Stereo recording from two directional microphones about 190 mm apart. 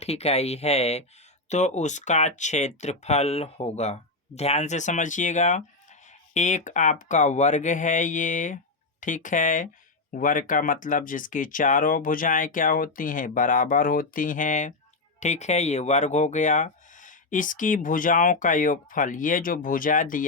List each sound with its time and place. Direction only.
0.0 s speech: 35° left (ahead or behind)